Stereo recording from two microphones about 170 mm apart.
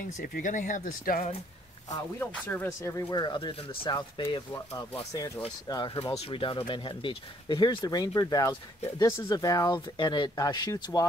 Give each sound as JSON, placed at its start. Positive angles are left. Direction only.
{"t": 0.2, "sound": "speech", "side_deg": 55}
{"t": 2.1, "sound": "speech", "side_deg": 10}
{"t": 5.9, "sound": "speech", "side_deg": 35}